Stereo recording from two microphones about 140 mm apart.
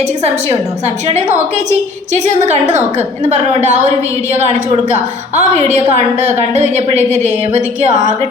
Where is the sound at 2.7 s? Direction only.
60° right (ahead or behind).